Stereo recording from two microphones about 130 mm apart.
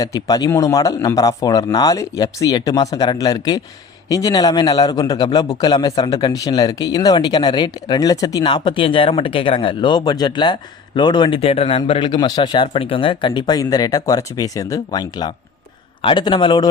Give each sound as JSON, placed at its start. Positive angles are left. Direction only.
{"t": 0.0, "sound": "a man's voice", "side_deg": 25}